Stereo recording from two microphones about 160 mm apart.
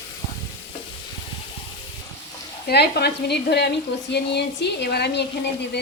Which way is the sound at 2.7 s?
90° left.